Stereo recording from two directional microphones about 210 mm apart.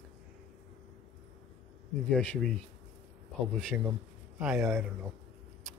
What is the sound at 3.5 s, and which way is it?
Speech, centre (ahead or behind).